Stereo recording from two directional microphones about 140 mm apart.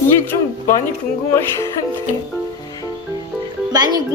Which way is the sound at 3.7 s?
30° right (ahead or behind).